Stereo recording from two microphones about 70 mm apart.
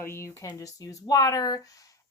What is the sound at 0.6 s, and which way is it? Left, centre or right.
Speech, left.